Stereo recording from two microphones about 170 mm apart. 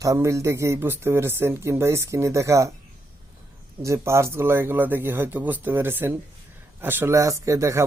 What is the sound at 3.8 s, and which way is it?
Speech, 15° right (ahead or behind).